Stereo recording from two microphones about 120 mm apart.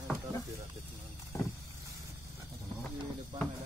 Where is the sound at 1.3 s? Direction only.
30° left (ahead or behind).